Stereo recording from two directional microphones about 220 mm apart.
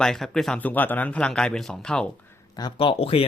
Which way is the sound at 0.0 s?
Centre (ahead or behind).